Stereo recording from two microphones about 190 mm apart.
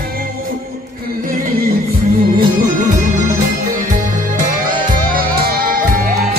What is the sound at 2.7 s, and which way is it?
Music, 40° right (ahead or behind).